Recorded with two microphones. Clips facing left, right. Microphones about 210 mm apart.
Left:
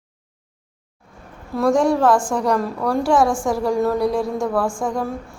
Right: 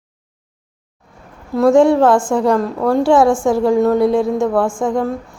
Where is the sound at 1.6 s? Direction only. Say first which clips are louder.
Right 6 dB; 25° right (ahead or behind).